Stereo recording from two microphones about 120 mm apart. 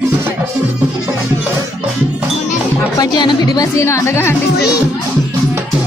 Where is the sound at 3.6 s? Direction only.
25° left (ahead or behind).